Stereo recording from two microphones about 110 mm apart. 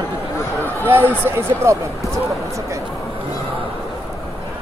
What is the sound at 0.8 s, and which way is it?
Speech, 20° right (ahead or behind).